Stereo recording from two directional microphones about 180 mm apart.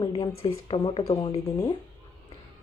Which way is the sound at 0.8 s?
35° left (ahead or behind).